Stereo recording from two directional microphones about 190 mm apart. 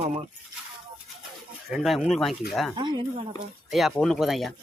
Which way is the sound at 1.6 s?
Centre (ahead or behind).